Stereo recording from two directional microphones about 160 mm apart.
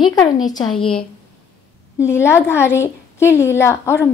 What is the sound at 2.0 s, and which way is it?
A woman's voice, 15° left (ahead or behind).